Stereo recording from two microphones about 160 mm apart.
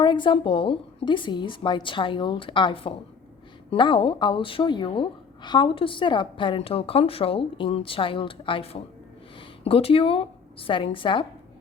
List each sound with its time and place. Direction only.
0.0 s a woman's voice: 30° left (ahead or behind)